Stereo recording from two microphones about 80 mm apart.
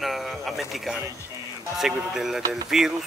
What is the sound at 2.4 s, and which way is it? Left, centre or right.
Speech, right.